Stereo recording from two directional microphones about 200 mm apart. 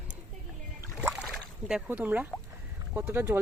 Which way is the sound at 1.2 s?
Centre (ahead or behind).